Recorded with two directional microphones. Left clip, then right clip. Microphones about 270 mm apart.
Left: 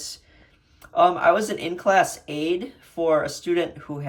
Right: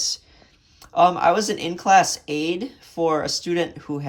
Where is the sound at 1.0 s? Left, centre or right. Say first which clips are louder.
Right 1 dB; centre.